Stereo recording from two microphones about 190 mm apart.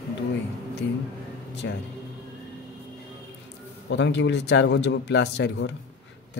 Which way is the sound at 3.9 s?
70° left (ahead or behind).